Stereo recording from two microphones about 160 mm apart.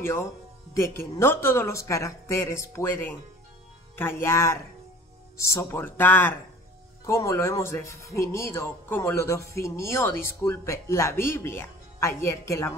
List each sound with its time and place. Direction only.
0.0 s speech: 15° left (ahead or behind)